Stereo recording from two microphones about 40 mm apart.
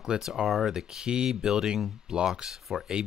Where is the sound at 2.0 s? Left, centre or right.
Centre.